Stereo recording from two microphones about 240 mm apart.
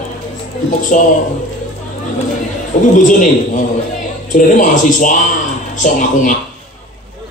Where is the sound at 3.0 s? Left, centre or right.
Left.